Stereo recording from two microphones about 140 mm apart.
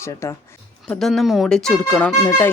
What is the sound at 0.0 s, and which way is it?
Speech, 20° left (ahead or behind).